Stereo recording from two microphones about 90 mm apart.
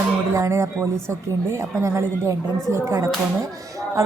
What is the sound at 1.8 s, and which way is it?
A woman's voice, 35° right (ahead or behind).